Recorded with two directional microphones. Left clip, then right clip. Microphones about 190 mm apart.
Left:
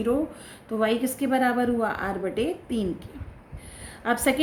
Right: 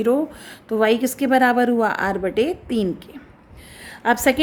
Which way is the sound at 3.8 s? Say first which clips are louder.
Right 7 dB; 40° right (ahead or behind).